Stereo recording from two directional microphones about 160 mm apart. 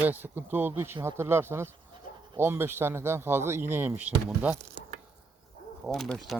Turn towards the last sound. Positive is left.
turn(degrees=0)  # may be behind; listen again after turning